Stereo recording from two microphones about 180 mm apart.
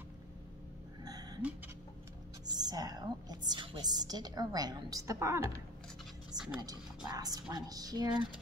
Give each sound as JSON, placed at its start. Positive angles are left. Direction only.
{"t": 1.0, "sound": "gasp", "side_deg": -20}
{"t": 2.4, "sound": "a woman's voice", "side_deg": -20}